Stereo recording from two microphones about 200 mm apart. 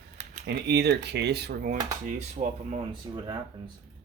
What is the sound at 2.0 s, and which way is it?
Speech, 35° right (ahead or behind).